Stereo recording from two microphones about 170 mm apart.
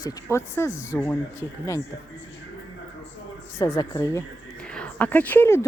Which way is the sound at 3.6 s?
20° left (ahead or behind).